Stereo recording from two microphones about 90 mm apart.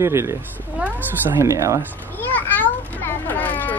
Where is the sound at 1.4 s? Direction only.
35° right (ahead or behind).